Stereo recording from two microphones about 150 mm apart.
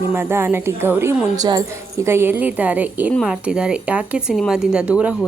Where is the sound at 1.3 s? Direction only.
25° right (ahead or behind).